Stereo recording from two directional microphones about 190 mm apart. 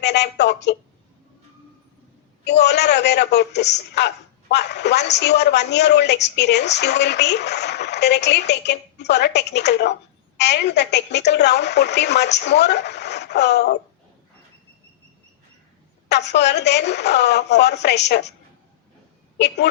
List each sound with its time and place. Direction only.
0.0 s a woman's voice: 65° left (ahead or behind)
2.4 s a man's voice: 65° left (ahead or behind)
16.0 s a man's voice: 65° left (ahead or behind)